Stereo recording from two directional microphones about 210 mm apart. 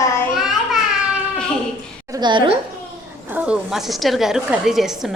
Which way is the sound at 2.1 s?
20° right (ahead or behind).